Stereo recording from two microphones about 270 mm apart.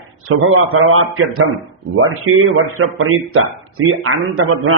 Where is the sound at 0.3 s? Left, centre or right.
Right.